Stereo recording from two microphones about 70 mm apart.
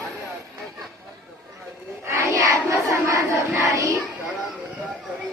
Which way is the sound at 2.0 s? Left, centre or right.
Right.